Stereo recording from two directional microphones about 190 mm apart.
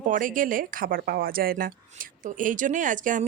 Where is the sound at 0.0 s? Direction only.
45° right (ahead or behind).